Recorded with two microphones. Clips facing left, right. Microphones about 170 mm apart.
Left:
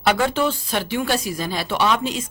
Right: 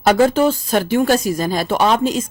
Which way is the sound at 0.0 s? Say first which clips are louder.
Right 6 dB; 40° right (ahead or behind).